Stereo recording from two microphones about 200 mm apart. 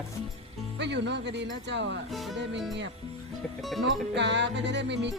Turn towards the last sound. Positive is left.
turn(degrees=-60)  # may be behind; listen again after turning